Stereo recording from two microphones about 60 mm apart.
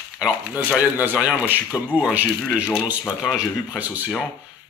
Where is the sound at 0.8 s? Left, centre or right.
Right.